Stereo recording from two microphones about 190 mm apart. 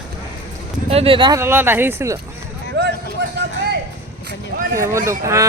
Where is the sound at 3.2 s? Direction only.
70° right (ahead or behind).